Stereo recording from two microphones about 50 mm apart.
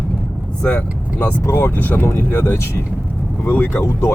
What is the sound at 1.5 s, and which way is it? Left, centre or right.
Speech, left.